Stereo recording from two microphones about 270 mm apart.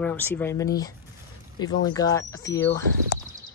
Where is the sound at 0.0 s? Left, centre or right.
Centre.